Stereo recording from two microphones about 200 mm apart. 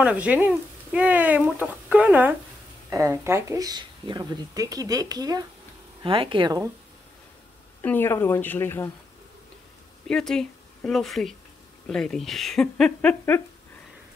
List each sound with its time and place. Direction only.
0.0 s speech: 5° right (ahead or behind); by 6.6 s 25° right (ahead or behind)
7.8 s a woman's voice: 10° left (ahead or behind)
10.0 s speech: 5° left (ahead or behind)